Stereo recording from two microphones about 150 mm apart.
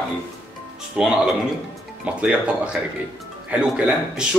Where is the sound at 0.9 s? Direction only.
5° right (ahead or behind).